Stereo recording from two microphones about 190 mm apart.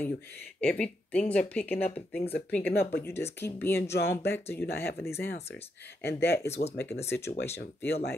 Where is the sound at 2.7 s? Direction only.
55° left (ahead or behind).